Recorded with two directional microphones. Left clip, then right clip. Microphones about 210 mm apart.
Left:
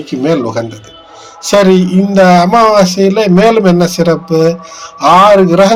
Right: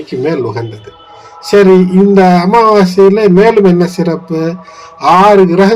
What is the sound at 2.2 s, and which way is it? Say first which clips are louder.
Speech: left 1 dB; 35° left (ahead or behind).